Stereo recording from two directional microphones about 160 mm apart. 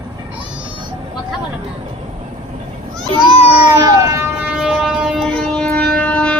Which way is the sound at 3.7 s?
20° right (ahead or behind).